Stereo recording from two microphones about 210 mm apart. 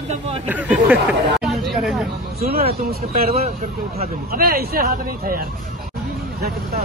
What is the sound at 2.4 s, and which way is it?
Speech, 45° right (ahead or behind).